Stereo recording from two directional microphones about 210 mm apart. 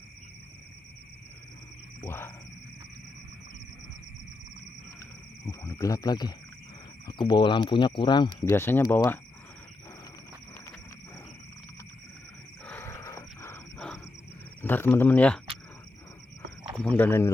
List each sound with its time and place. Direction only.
2.0 s speech: 10° left (ahead or behind)
5.5 s speech: 15° left (ahead or behind)
8.4 s speech: 10° left (ahead or behind)
12.6 s a sound: 10° left (ahead or behind)
14.6 s speech: 10° left (ahead or behind)
16.7 s speech: 5° left (ahead or behind)